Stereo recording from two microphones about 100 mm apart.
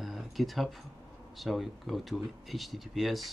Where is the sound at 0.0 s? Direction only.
Centre (ahead or behind).